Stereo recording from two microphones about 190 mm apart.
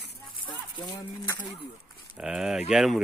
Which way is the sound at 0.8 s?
20° left (ahead or behind).